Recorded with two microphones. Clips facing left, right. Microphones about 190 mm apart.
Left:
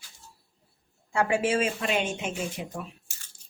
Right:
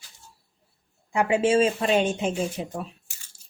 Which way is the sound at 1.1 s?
20° right (ahead or behind).